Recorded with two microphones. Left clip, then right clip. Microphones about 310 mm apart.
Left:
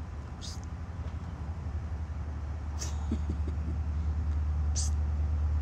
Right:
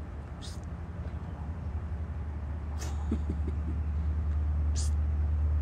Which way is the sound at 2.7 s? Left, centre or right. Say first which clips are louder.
Right 1 dB; centre.